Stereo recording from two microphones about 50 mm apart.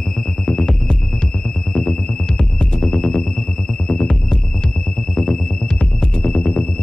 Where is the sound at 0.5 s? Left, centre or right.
Centre.